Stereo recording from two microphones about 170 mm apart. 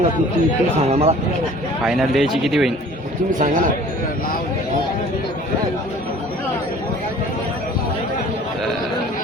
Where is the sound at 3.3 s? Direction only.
50° right (ahead or behind).